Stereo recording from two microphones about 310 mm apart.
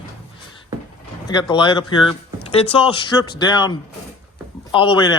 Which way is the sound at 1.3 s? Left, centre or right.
Centre.